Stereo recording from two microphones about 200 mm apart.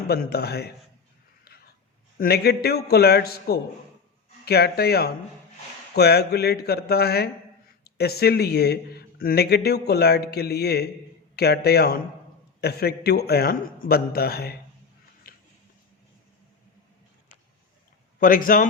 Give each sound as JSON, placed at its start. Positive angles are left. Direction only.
{"t": 0.1, "sound": "speech", "side_deg": 50}
{"t": 1.5, "sound": "a sound", "side_deg": 50}
{"t": 2.1, "sound": "speech", "side_deg": 50}
{"t": 18.2, "sound": "speech", "side_deg": 45}